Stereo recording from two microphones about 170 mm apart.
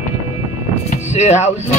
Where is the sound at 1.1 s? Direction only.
40° left (ahead or behind).